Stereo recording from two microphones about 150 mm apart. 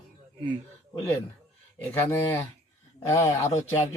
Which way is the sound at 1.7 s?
15° left (ahead or behind).